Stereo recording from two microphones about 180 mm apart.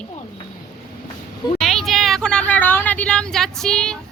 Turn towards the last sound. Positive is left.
turn(degrees=5)  # may be behind; listen again after turning